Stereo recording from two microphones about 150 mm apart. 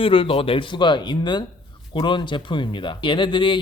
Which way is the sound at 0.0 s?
35° left (ahead or behind).